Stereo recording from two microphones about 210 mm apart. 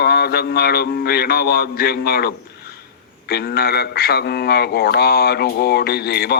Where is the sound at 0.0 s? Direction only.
50° left (ahead or behind).